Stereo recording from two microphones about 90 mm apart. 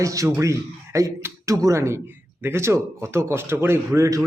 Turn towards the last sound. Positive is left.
turn(degrees=-35)  # may be behind; listen again after turning